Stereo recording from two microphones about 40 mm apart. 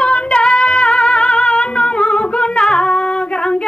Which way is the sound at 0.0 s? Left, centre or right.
Left.